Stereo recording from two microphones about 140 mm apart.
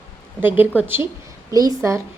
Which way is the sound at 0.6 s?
15° right (ahead or behind).